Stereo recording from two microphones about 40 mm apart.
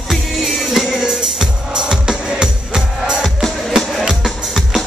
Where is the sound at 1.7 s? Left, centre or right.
Right.